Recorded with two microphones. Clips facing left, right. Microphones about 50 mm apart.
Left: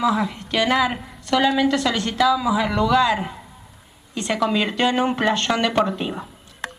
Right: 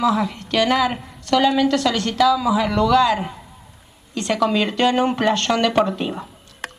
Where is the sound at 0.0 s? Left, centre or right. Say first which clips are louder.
Right 1 dB; centre.